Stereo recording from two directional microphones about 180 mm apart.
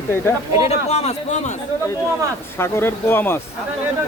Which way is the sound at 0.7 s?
35° left (ahead or behind).